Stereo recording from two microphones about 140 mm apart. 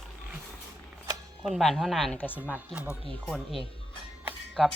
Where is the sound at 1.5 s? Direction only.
Centre (ahead or behind).